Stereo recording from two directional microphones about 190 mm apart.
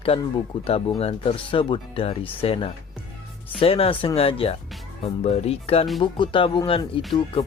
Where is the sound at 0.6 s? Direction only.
30° left (ahead or behind).